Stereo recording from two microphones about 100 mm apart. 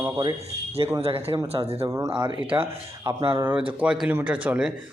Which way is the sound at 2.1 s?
50° right (ahead or behind).